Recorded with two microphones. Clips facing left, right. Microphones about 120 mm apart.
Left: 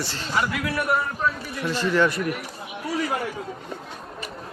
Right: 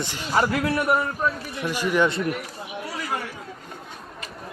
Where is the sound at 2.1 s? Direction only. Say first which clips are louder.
Right 1 dB; 25° right (ahead or behind).